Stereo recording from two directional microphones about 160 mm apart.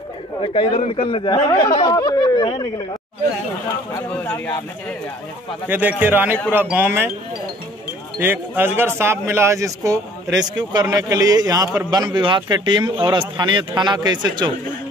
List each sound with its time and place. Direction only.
0.4 s speech: 35° left (ahead or behind)
5.7 s a man's voice: 10° right (ahead or behind)
8.2 s speech: 10° right (ahead or behind); by 14.5 s 30° right (ahead or behind)